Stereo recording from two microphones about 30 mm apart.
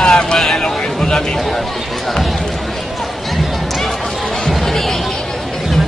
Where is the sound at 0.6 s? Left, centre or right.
Centre.